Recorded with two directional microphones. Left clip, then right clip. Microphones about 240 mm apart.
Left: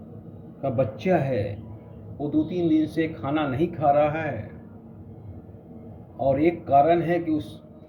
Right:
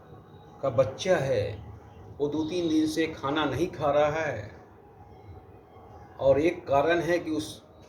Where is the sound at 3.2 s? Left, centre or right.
Centre.